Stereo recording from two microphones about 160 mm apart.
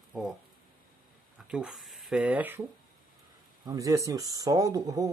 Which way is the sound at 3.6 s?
20° right (ahead or behind).